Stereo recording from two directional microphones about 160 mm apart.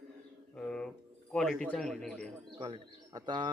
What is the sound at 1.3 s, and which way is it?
Speech, 5° left (ahead or behind).